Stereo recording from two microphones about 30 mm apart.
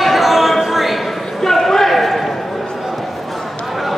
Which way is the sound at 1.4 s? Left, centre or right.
Centre.